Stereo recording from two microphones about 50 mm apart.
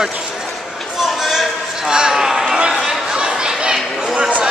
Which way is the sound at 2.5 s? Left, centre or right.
Centre.